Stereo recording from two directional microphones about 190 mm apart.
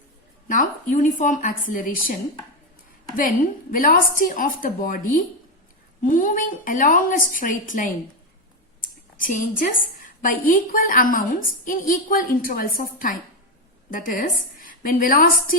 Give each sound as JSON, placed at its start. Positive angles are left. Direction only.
{"t": 0.4, "sound": "a woman's voice", "side_deg": 45}
{"t": 3.2, "sound": "a woman's voice", "side_deg": 45}
{"t": 9.1, "sound": "a woman's voice", "side_deg": 45}